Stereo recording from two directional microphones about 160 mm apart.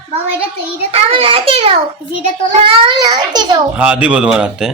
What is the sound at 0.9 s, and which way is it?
A child's voice, 35° right (ahead or behind).